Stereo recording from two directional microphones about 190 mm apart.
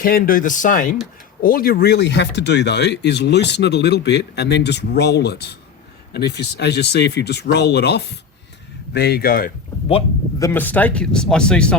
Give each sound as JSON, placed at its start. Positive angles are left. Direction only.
{"t": 0.0, "sound": "speech", "side_deg": 50}
{"t": 10.3, "sound": "speech", "side_deg": 15}